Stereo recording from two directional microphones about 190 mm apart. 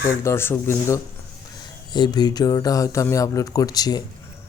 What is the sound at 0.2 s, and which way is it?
Speech, 15° left (ahead or behind).